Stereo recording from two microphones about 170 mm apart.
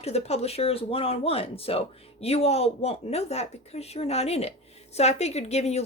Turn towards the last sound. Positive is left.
turn(degrees=40)  # may be behind; listen again after turning